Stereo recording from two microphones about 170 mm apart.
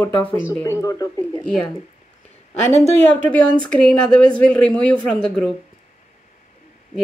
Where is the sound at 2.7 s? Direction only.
40° right (ahead or behind).